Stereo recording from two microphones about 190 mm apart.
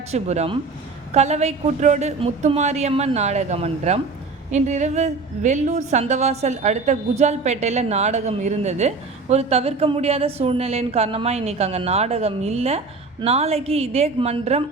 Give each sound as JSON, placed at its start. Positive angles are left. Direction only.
{"t": 0.1, "sound": "a woman's voice", "side_deg": -35}